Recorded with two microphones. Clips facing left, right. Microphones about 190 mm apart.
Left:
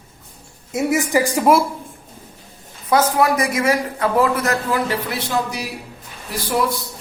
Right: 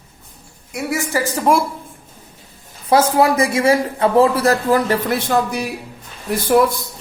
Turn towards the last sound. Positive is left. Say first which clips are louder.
# right 7 dB
turn(degrees=-50)  # may be behind; listen again after turning